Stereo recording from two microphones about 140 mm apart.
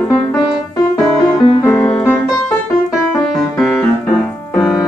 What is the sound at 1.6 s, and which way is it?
Music, 10° left (ahead or behind).